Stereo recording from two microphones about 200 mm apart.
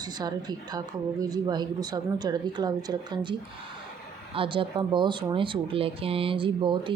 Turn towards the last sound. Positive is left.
turn(degrees=-25)  # may be behind; listen again after turning